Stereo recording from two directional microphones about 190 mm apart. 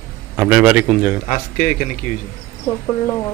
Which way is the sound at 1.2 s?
45° left (ahead or behind).